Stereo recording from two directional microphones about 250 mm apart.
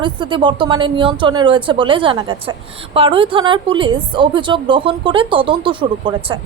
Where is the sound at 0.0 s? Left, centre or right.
Centre.